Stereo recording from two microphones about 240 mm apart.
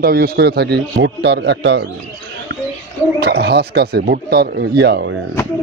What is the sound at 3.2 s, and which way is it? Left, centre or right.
A man's voice, right.